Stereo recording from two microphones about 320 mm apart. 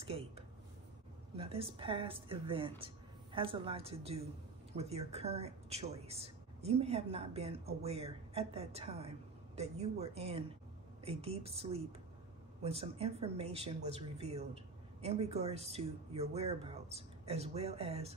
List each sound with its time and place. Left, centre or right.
1.3 s a woman's voice: centre